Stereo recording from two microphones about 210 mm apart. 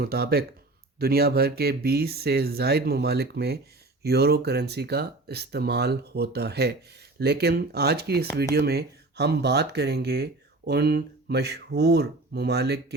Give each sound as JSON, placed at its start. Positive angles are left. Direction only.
{"t": 0.0, "sound": "speech", "side_deg": -45}